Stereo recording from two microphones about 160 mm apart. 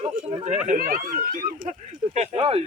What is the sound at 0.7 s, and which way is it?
Speech, 60° right (ahead or behind).